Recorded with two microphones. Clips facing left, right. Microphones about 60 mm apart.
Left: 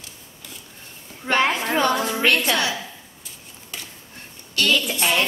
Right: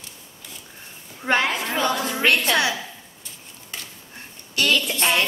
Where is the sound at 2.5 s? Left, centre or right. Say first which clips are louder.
Right 1 dB; centre.